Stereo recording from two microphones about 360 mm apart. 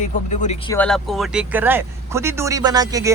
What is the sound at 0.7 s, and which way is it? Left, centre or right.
Speech, centre.